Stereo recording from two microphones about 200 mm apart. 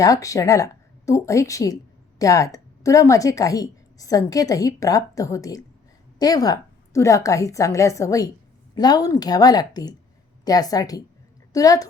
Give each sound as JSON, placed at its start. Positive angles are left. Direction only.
{"t": 0.0, "sound": "a woman's voice", "side_deg": 15}